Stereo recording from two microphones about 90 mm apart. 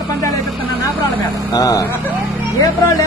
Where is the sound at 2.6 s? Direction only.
40° left (ahead or behind).